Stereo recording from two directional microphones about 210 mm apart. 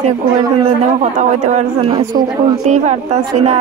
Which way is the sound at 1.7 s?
20° right (ahead or behind).